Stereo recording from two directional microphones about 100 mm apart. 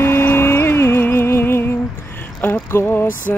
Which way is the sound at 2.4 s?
25° left (ahead or behind).